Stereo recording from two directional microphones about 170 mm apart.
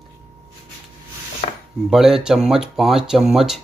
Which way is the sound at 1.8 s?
Centre (ahead or behind).